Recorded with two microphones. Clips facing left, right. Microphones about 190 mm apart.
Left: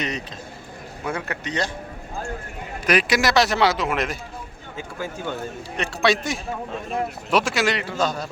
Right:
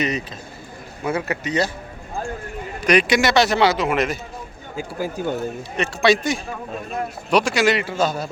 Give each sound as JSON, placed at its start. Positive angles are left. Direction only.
{"t": 0.0, "sound": "a man's voice", "side_deg": -5}
{"t": 2.8, "sound": "a man's voice", "side_deg": 5}
{"t": 4.8, "sound": "speech", "side_deg": -35}
{"t": 5.7, "sound": "a man's voice", "side_deg": 0}